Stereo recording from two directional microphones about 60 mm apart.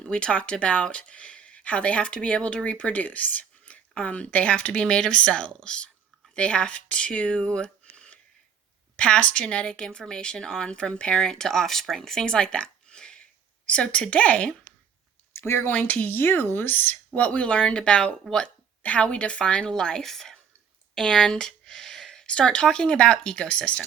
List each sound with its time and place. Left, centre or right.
0.0 s speech: centre
12.9 s a sound: centre
13.7 s speech: centre
15.3 s speech: left
15.9 s speech: left; by 23.8 s centre